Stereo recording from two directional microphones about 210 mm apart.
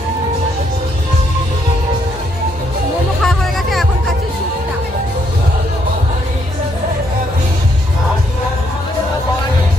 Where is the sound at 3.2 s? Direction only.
Centre (ahead or behind).